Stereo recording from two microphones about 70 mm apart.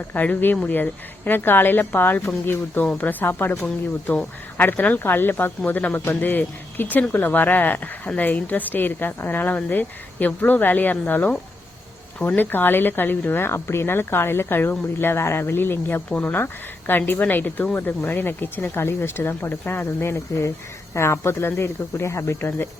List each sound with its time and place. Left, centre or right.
0.1 s a woman's voice: left
12.4 s a woman's voice: left